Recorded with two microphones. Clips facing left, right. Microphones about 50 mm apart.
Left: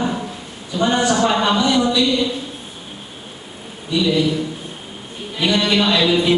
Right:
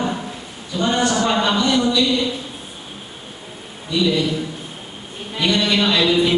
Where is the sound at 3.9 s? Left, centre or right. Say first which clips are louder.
Left 1 dB; centre.